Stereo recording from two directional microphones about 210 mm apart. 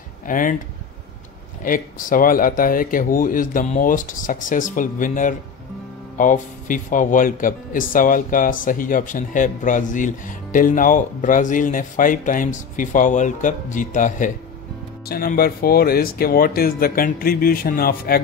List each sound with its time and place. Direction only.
0.3 s speech: 40° left (ahead or behind)
1.6 s speech: 40° left (ahead or behind)